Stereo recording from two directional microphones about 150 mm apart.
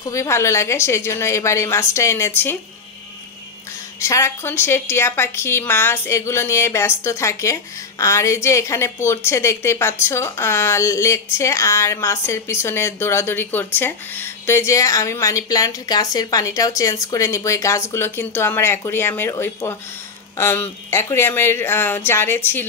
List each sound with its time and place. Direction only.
0.0 s a woman's voice: 20° left (ahead or behind)
4.0 s a woman's voice: 20° left (ahead or behind)